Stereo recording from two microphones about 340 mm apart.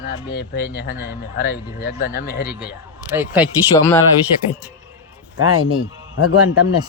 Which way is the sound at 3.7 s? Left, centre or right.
Centre.